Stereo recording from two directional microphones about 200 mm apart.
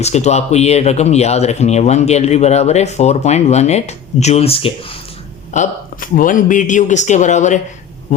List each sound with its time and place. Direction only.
0.0 s speech: 35° left (ahead or behind)
5.5 s speech: 40° left (ahead or behind)